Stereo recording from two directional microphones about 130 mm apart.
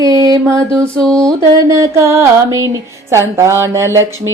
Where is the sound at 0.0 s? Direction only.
25° right (ahead or behind).